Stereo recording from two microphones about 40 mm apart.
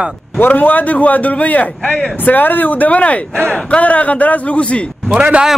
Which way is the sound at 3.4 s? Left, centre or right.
Left.